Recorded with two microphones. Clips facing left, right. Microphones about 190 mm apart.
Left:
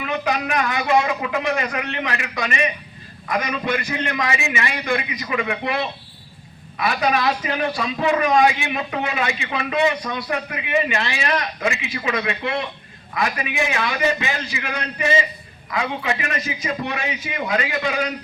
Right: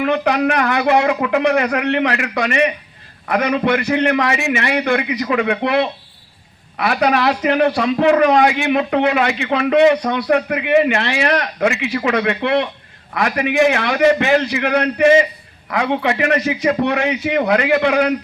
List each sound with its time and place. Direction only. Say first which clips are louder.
0.0 s a man's voice: right 8 dB; 65° right (ahead or behind)